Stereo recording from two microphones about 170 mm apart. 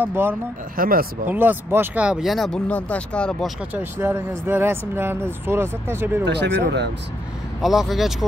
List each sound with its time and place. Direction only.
0.0 s speech: 10° right (ahead or behind)
0.7 s speech: 55° right (ahead or behind)
1.2 s speech: 10° right (ahead or behind)
3.7 s speech: 10° right (ahead or behind)
6.2 s speech: 90° right
7.6 s speech: centre (ahead or behind)